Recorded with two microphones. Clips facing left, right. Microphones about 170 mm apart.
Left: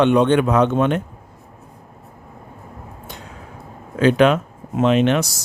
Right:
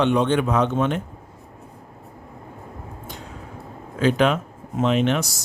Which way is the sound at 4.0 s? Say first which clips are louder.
Left 5 dB; 70° left (ahead or behind).